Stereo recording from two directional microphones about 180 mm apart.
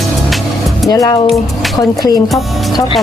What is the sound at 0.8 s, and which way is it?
Speech, 20° left (ahead or behind).